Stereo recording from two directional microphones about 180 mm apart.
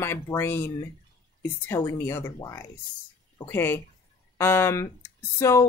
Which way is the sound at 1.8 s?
15° left (ahead or behind).